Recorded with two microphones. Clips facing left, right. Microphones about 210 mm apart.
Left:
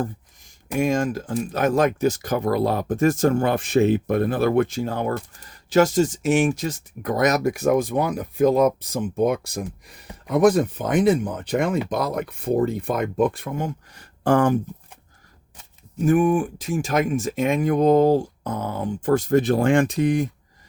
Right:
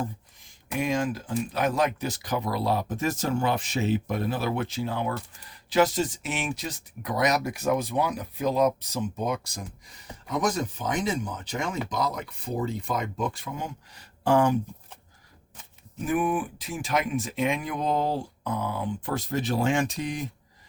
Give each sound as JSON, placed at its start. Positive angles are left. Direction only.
{"t": 0.0, "sound": "speech", "side_deg": 50}
{"t": 16.0, "sound": "speech", "side_deg": 45}